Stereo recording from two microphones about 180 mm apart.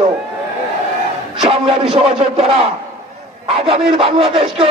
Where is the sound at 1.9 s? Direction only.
35° right (ahead or behind).